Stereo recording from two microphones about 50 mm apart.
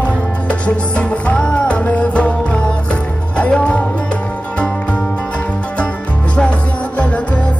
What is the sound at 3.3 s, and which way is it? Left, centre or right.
Music, left.